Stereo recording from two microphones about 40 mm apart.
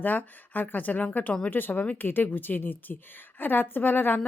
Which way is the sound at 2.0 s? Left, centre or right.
Left.